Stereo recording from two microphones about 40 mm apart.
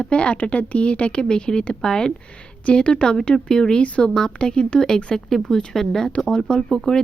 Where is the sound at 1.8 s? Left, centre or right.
Centre.